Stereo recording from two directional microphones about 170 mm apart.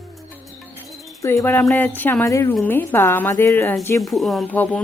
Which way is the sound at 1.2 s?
15° left (ahead or behind).